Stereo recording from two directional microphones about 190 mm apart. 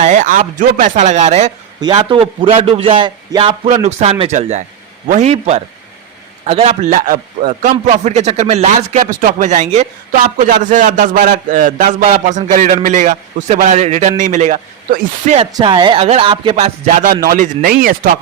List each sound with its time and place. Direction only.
0.0 s speech: 40° right (ahead or behind)
1.8 s speech: 25° right (ahead or behind); by 15.4 s 45° right (ahead or behind)
15.4 s speech: 25° right (ahead or behind); by 18.1 s 50° right (ahead or behind)